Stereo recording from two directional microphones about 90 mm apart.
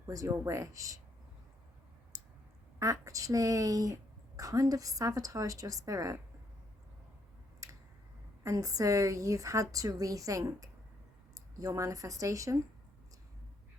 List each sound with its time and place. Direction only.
0.1 s a woman's voice: 35° right (ahead or behind)
2.7 s a woman's voice: 40° right (ahead or behind)
7.6 s a sound: 35° right (ahead or behind)
8.4 s a woman's voice: 40° right (ahead or behind)